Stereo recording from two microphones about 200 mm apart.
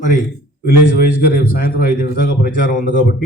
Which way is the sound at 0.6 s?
50° left (ahead or behind).